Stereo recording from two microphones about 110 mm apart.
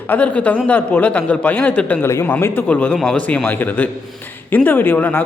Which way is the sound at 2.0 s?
20° left (ahead or behind).